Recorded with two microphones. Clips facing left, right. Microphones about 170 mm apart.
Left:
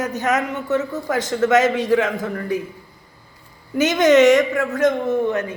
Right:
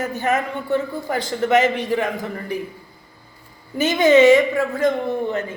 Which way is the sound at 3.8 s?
80° left.